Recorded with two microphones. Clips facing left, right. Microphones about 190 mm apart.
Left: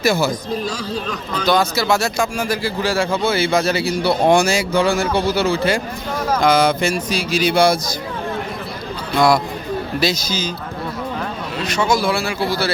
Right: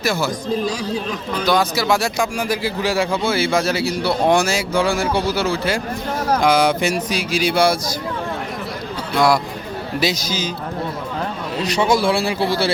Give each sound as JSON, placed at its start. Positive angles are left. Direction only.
{"t": 0.0, "sound": "speech", "side_deg": 0}
{"t": 1.5, "sound": "a man's voice", "side_deg": -10}
{"t": 9.1, "sound": "speech", "side_deg": -5}
{"t": 10.0, "sound": "a man's voice", "side_deg": -15}
{"t": 11.6, "sound": "speech", "side_deg": -35}